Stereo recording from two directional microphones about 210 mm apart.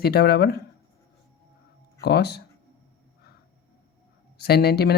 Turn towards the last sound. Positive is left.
turn(degrees=50)  # may be behind; listen again after turning